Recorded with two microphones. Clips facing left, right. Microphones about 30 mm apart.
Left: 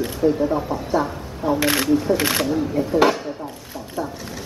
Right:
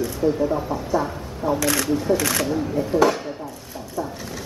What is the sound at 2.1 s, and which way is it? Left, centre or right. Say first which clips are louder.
Speech: left 1 dB; left.